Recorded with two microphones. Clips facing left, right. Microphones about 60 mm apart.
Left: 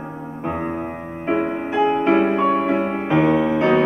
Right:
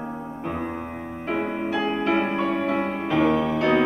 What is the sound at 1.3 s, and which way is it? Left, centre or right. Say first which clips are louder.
Music: left 4 dB; left.